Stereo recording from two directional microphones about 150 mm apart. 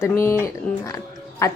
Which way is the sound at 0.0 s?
15° left (ahead or behind).